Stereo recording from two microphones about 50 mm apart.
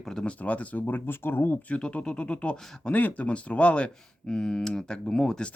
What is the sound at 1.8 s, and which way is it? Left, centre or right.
Speech, left.